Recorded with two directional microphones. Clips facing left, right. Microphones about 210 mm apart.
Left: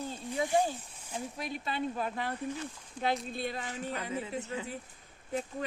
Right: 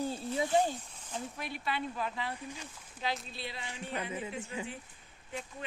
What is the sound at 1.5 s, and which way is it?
Speech, 40° left (ahead or behind).